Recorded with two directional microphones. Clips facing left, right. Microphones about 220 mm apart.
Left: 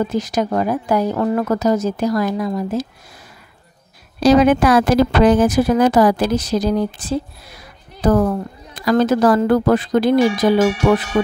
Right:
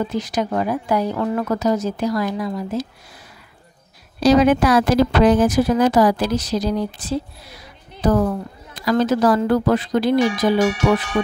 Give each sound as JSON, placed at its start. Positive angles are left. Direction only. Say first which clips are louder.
{"t": 0.1, "sound": "speech", "louder": "left 3 dB", "side_deg": 45}
{"t": 4.2, "sound": "speech", "louder": "left 2 dB", "side_deg": 55}